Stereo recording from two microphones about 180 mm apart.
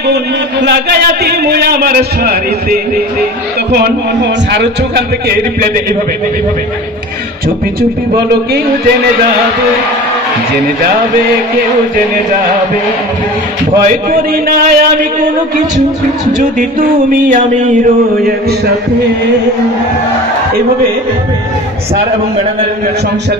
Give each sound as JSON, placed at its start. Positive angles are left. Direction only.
{"t": 0.0, "sound": "a man's voice", "side_deg": -65}
{"t": 3.7, "sound": "a man's voice", "side_deg": -75}
{"t": 13.8, "sound": "a man's voice", "side_deg": -55}
{"t": 16.5, "sound": "a man's voice", "side_deg": -45}